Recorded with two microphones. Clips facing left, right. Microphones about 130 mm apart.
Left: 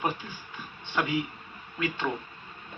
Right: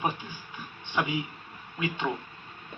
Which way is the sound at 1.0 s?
15° right (ahead or behind).